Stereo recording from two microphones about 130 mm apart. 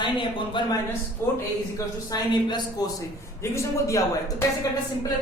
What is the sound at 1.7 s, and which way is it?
A man's voice, 30° left (ahead or behind).